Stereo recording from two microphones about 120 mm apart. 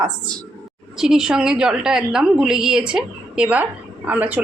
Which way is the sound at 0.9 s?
5° right (ahead or behind).